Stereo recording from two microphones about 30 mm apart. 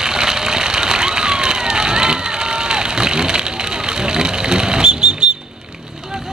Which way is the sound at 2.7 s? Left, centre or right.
Right.